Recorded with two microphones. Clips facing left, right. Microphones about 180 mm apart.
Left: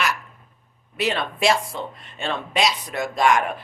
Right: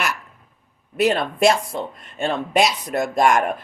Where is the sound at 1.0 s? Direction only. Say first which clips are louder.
Right 6 dB; 50° right (ahead or behind).